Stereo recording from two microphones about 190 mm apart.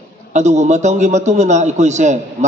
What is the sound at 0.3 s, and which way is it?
A man's voice, 40° right (ahead or behind).